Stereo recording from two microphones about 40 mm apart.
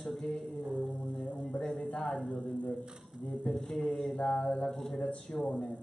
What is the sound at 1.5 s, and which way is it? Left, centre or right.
Speech, left.